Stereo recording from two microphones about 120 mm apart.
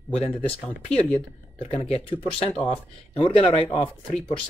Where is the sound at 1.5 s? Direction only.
60° left (ahead or behind).